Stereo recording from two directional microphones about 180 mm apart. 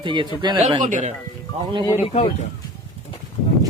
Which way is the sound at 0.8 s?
40° right (ahead or behind).